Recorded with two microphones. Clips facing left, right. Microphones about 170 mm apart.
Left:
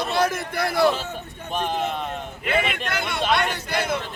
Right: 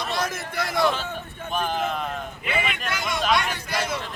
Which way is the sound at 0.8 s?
35° left (ahead or behind).